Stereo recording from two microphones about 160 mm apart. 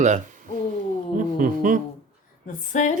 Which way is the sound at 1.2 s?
55° right (ahead or behind).